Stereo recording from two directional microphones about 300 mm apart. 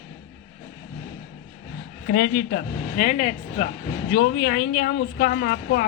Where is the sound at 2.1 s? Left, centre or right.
Left.